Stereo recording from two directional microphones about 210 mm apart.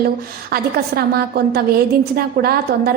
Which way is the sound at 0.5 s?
50° right (ahead or behind).